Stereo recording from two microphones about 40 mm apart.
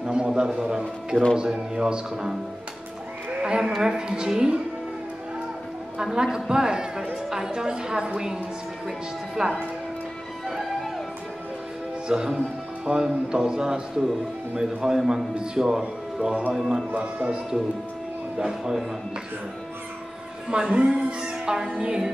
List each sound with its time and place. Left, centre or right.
0.0 s a sound: right
1.4 s a woman's voice: centre
3.4 s a woman's voice: centre
5.9 s a woman's voice: centre
12.1 s a woman's voice: centre
12.9 s a woman's voice: right; by 16.8 s centre
16.9 s a woman's voice: right
18.4 s a woman's voice: centre
20.4 s a woman's voice: right
20.9 s music: right
21.5 s a woman's voice: centre